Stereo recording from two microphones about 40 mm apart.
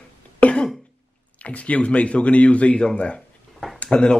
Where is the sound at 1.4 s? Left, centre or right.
Left.